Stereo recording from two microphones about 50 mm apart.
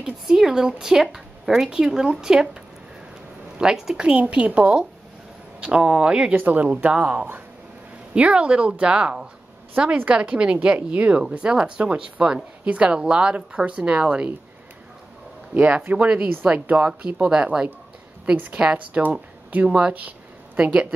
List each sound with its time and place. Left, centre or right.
0.3 s speech: centre
3.5 s a woman's voice: centre
4.0 s a woman's voice: right
6.3 s a woman's voice: right
15.5 s a woman's voice: right